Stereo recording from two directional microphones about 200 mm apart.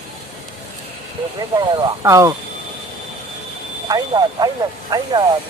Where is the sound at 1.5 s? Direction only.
20° right (ahead or behind).